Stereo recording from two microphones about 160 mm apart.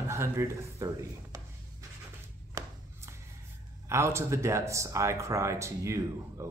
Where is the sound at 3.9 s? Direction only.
15° right (ahead or behind).